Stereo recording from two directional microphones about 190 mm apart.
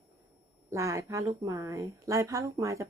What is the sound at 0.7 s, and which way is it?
A woman's voice, 15° right (ahead or behind).